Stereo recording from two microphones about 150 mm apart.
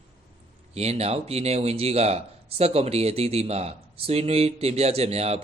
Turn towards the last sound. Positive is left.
turn(degrees=-45)  # may be behind; listen again after turning